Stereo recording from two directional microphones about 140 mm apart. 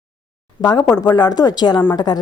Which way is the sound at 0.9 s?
30° left (ahead or behind).